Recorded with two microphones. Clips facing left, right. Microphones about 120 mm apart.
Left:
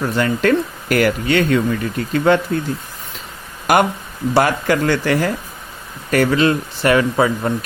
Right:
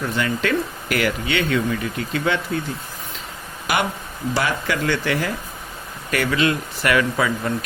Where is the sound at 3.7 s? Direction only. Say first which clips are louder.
Left 7 dB; 45° left (ahead or behind).